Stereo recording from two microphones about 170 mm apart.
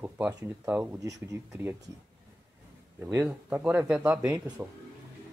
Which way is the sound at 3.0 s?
15° right (ahead or behind).